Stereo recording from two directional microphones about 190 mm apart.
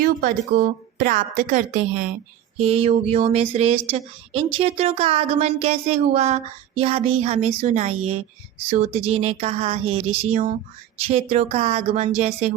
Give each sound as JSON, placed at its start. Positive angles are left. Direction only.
{"t": 0.0, "sound": "a woman's voice", "side_deg": -45}
{"t": 2.6, "sound": "speech", "side_deg": -30}
{"t": 9.0, "sound": "speech", "side_deg": -35}